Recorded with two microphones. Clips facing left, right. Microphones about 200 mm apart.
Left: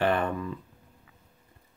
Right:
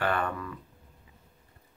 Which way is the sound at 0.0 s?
20° left (ahead or behind).